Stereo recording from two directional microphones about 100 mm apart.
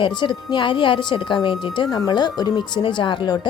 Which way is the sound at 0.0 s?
50° left (ahead or behind).